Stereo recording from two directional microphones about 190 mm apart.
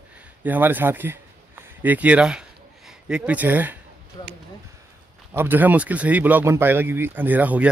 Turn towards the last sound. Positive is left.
turn(degrees=-10)  # may be behind; listen again after turning